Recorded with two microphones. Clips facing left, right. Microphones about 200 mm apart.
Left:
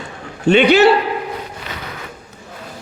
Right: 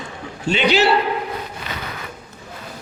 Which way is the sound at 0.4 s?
60° left (ahead or behind).